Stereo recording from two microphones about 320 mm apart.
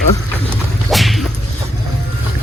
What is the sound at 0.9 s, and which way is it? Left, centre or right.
Whip, centre.